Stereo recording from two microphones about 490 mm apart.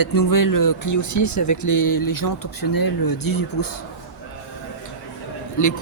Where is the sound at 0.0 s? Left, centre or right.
Left.